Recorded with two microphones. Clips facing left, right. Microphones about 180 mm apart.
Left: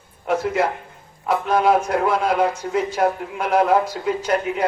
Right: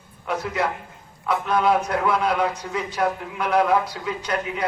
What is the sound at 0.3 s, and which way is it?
A man's voice, 45° left (ahead or behind).